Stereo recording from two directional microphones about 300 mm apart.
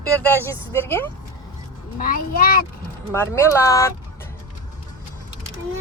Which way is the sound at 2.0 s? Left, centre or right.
Left.